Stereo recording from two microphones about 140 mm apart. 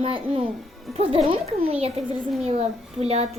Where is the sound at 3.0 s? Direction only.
50° right (ahead or behind).